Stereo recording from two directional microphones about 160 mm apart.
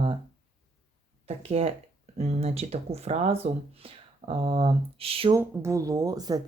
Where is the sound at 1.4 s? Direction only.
40° right (ahead or behind).